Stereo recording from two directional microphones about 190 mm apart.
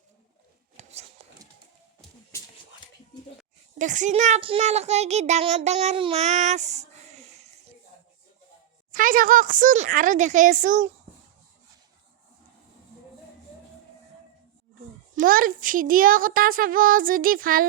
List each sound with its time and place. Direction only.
0.8 s a sound: 35° right (ahead or behind)
3.8 s a child's voice: 40° right (ahead or behind)
8.9 s speech: 45° right (ahead or behind)
15.1 s a woman's voice: 45° right (ahead or behind)